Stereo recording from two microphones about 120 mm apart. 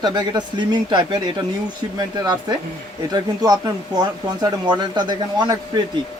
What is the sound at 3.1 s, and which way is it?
Speech, 30° right (ahead or behind).